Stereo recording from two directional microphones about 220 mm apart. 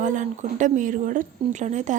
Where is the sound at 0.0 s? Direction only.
35° right (ahead or behind).